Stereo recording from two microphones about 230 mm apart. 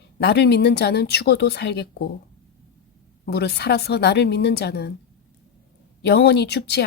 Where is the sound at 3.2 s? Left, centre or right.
Left.